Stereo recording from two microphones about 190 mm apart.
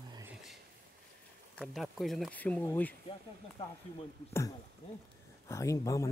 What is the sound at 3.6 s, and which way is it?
Speech, 30° left (ahead or behind).